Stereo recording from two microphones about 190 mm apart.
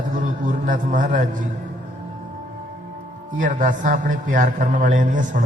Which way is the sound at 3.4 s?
40° right (ahead or behind).